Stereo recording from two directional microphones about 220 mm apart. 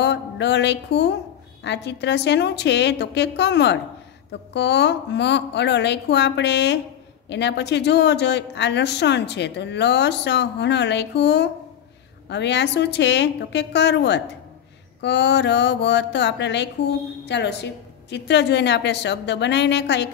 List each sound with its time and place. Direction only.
0.0 s music: 50° left (ahead or behind)
1.6 s a woman's voice: 50° left (ahead or behind)